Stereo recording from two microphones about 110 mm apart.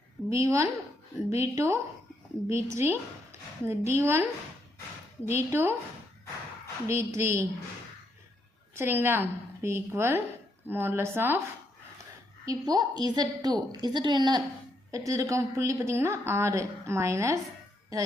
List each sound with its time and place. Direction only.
0.3 s speech: 25° right (ahead or behind)
6.8 s speech: 25° right (ahead or behind)
8.7 s speech: 20° right (ahead or behind)
12.5 s a woman's voice: 35° right (ahead or behind)
14.9 s speech: 30° right (ahead or behind)